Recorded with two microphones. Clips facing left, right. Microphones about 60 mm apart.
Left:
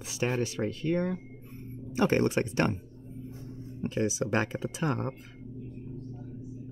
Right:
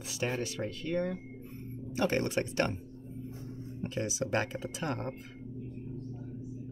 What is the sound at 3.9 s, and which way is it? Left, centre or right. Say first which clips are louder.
Speech: left 4 dB; left.